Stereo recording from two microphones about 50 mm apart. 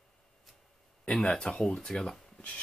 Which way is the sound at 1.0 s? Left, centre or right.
Centre.